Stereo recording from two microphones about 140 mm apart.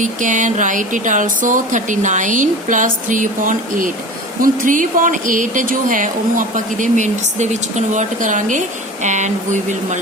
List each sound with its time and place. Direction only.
0.0 s speech: 65° right (ahead or behind)